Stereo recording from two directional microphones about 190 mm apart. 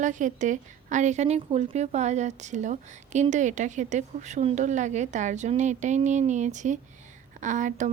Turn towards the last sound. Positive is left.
turn(degrees=-40)  # may be behind; listen again after turning